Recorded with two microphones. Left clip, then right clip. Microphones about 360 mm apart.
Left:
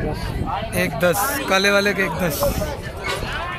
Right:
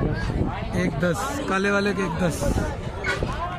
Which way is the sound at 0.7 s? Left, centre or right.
Centre.